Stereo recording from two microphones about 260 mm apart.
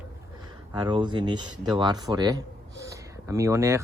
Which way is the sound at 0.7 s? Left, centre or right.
Centre.